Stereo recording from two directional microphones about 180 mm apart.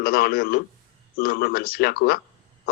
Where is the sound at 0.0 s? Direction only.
55° left (ahead or behind).